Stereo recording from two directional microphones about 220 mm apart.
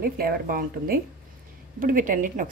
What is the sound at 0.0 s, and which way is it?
A woman's voice, 40° right (ahead or behind).